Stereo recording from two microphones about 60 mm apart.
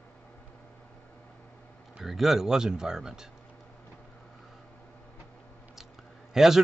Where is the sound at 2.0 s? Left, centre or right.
Centre.